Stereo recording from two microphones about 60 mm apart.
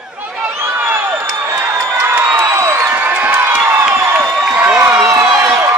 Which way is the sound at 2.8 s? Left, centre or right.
Right.